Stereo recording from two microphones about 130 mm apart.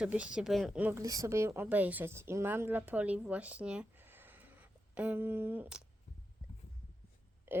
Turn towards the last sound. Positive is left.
turn(degrees=-15)  # may be behind; listen again after turning